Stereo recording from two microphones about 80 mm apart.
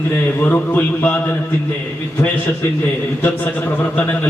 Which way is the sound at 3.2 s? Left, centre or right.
Left.